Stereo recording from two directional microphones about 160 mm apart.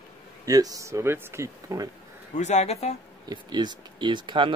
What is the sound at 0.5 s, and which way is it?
Speech, 20° right (ahead or behind).